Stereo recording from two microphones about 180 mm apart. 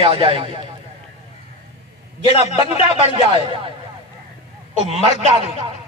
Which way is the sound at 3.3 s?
30° right (ahead or behind).